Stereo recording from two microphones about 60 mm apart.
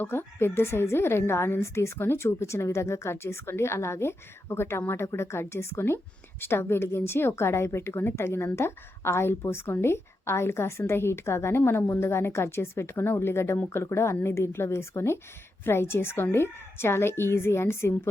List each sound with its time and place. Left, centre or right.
0.0 s a woman's voice: left